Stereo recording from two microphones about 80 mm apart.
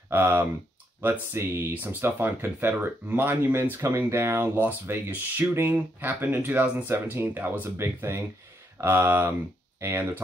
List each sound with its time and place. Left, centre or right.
0.1 s speech: right